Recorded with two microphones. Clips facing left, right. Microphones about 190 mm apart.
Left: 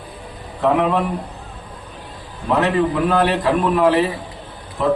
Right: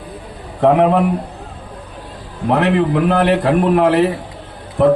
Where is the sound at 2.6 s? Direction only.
60° right (ahead or behind).